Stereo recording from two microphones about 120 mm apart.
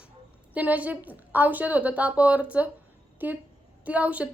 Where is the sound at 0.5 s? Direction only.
15° right (ahead or behind).